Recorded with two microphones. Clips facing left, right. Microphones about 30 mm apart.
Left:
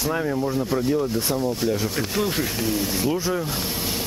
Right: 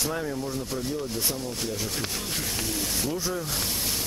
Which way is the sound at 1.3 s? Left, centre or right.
Centre.